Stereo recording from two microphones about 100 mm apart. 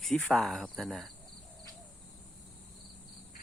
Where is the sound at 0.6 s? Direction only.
Centre (ahead or behind).